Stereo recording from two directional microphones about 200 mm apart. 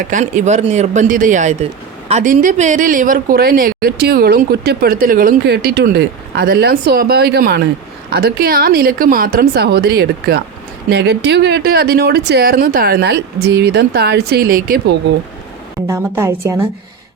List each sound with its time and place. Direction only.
0.0 s speech: 40° right (ahead or behind)
15.9 s a woman's voice: 15° right (ahead or behind)